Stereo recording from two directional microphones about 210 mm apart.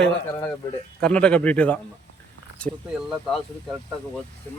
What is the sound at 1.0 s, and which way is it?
Speech, 5° left (ahead or behind).